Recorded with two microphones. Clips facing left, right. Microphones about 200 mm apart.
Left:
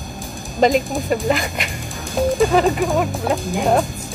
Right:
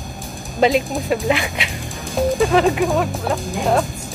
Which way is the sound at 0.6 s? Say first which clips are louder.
Even; centre (ahead or behind).